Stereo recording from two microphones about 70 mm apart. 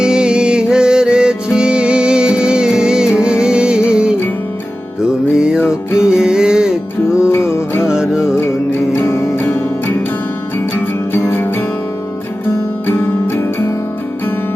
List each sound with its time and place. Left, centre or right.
0.0 s music: centre
7.2 s music: left
7.9 s music: centre
8.4 s music: left
12.9 s music: left